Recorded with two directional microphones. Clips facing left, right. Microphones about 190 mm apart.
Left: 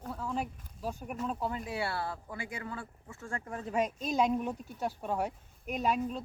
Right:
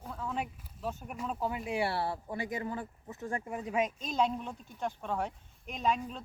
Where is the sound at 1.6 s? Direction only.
15° right (ahead or behind).